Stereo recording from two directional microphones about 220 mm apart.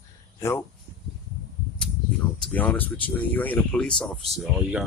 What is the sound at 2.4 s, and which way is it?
Speech, 5° left (ahead or behind).